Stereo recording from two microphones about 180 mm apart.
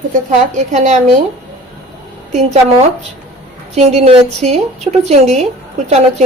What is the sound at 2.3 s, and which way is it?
Speech, 40° right (ahead or behind).